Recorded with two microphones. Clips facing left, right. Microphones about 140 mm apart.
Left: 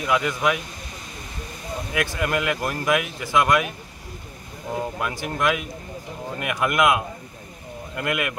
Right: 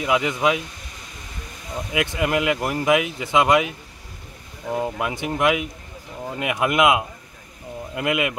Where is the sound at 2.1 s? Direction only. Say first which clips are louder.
Right 4 dB; 15° right (ahead or behind).